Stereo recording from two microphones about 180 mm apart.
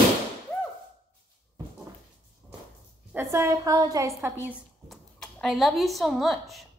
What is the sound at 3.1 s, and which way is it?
A woman's voice, 15° right (ahead or behind).